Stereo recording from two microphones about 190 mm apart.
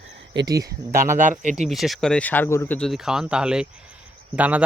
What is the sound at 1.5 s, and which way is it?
A man's voice, centre (ahead or behind).